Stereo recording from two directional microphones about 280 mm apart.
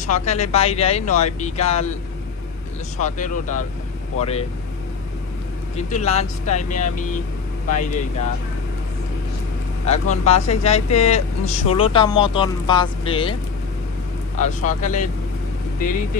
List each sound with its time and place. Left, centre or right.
0.0 s speech: left
3.0 s speech: left
5.8 s speech: left
9.8 s speech: left
14.4 s speech: left